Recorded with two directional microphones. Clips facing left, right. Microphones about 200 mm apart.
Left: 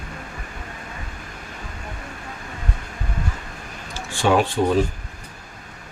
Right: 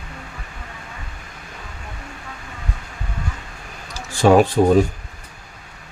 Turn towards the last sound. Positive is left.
turn(degrees=-40)  # may be behind; listen again after turning